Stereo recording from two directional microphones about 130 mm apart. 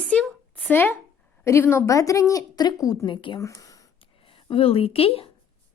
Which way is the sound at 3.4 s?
25° left (ahead or behind).